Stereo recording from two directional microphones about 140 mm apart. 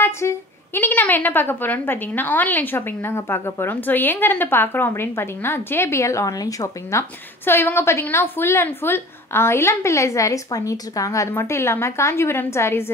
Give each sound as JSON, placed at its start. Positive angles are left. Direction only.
{"t": 0.0, "sound": "a woman's voice", "side_deg": 15}